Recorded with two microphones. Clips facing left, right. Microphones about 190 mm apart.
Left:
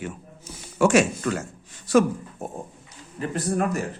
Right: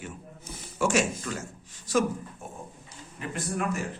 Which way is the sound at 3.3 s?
40° left (ahead or behind).